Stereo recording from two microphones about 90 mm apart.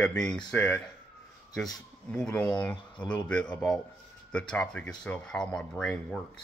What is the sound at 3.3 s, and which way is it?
Speech, 10° left (ahead or behind).